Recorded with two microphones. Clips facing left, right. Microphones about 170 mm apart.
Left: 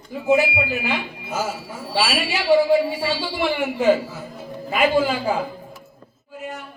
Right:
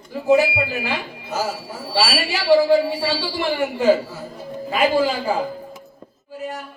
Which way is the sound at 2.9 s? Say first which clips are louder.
Right 1 dB; 35° right (ahead or behind).